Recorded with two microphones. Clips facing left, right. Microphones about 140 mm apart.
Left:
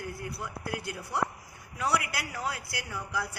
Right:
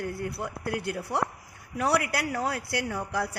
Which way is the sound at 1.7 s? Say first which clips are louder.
Right 4 dB; 65° right (ahead or behind).